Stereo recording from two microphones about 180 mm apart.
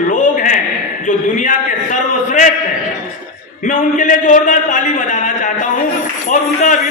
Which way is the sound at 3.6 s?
45° left (ahead or behind).